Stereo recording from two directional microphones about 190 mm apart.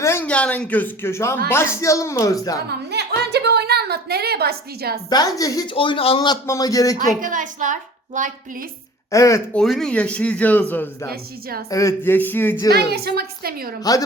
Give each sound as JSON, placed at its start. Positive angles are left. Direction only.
{"t": 0.0, "sound": "speech", "side_deg": 10}
{"t": 2.6, "sound": "music", "side_deg": -60}
{"t": 5.0, "sound": "a man's voice", "side_deg": 20}
{"t": 7.2, "sound": "a woman's voice", "side_deg": -45}
{"t": 9.1, "sound": "speech", "side_deg": 15}
{"t": 9.6, "sound": "speech", "side_deg": 0}
{"t": 11.1, "sound": "a woman's voice", "side_deg": -50}
{"t": 11.7, "sound": "speech", "side_deg": 15}
{"t": 12.9, "sound": "a woman's voice", "side_deg": -55}